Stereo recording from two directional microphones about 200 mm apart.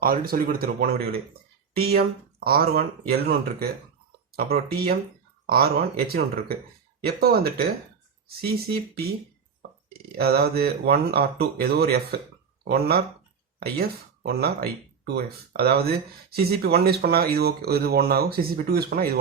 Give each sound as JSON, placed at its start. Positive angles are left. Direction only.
{"t": 0.0, "sound": "speech", "side_deg": -45}
{"t": 10.2, "sound": "speech", "side_deg": -50}
{"t": 13.6, "sound": "speech", "side_deg": -50}